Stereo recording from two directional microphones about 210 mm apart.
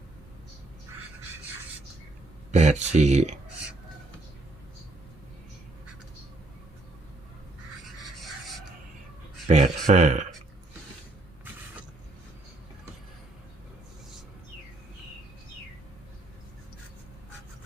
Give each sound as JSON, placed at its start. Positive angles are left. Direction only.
{"t": 2.5, "sound": "speech", "side_deg": -35}
{"t": 9.5, "sound": "speech", "side_deg": -35}